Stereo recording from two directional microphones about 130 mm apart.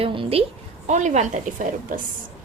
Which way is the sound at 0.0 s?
45° right (ahead or behind).